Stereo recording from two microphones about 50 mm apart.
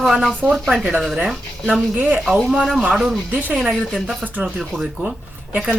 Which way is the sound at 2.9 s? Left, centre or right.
Centre.